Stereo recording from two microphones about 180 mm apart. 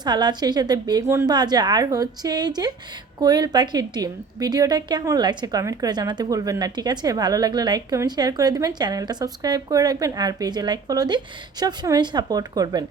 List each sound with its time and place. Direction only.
0.0 s a woman's voice: 25° right (ahead or behind)